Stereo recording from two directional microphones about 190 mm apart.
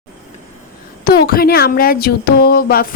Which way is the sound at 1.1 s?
50° left (ahead or behind).